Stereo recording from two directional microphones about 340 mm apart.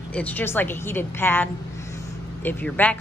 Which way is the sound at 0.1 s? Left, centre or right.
Centre.